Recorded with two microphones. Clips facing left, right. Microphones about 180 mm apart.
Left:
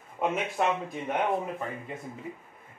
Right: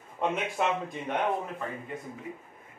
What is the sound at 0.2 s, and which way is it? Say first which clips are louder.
Speech: left 1 dB; 5° left (ahead or behind).